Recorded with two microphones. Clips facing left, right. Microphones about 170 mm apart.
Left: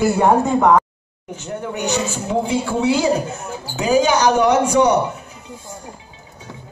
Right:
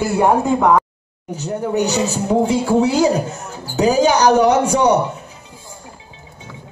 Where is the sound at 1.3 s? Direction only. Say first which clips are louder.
Right 7 dB; 35° right (ahead or behind).